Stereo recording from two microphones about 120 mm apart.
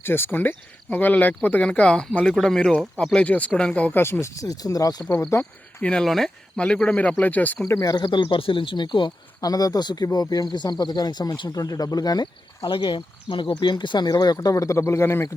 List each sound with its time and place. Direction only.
0.0 s speech: 20° left (ahead or behind)
5.8 s speech: 5° left (ahead or behind)
7.7 s speech: 30° left (ahead or behind)